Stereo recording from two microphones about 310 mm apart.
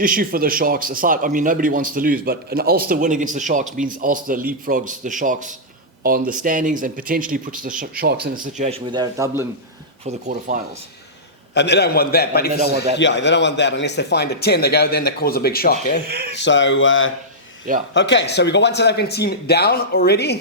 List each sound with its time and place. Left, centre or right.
0.0 s speech: right; by 9.5 s centre
10.1 s speech: right
11.5 s speech: left
12.6 s speech: right
13.0 s speech: left
16.0 s speech: right
16.3 s speech: left